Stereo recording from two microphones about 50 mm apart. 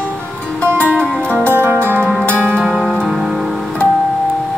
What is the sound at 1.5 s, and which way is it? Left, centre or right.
Music, right.